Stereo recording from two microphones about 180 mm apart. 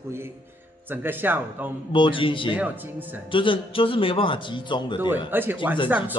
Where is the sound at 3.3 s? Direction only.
30° left (ahead or behind).